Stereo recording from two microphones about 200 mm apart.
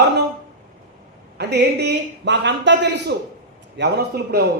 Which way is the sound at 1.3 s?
55° right (ahead or behind).